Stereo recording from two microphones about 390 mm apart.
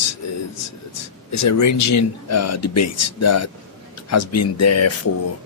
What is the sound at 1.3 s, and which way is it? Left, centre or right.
Speech, left.